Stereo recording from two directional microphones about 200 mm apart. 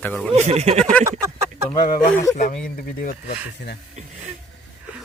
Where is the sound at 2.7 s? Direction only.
45° left (ahead or behind).